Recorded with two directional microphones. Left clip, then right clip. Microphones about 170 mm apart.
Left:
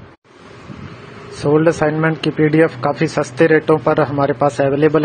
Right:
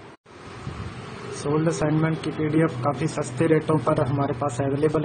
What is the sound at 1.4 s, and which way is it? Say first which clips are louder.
Speech: left 10 dB; 40° left (ahead or behind).